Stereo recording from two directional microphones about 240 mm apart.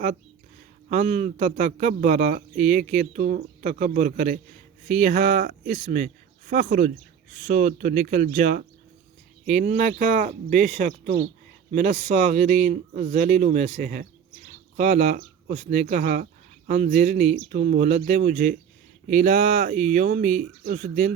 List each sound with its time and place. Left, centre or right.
0.9 s speech: right